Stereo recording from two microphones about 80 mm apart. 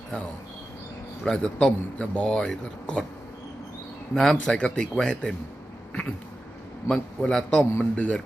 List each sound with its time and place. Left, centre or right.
1.2 s a man's voice: centre
4.1 s a man's voice: centre
6.8 s a man's voice: centre